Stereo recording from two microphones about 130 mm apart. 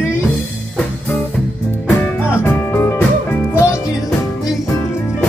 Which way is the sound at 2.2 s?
20° left (ahead or behind).